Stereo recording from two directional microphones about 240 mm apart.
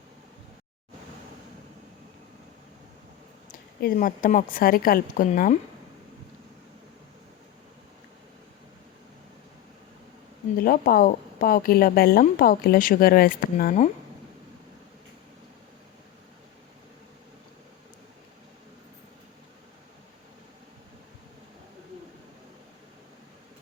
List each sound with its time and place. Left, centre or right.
3.8 s a woman's voice: left
10.6 s a woman's voice: left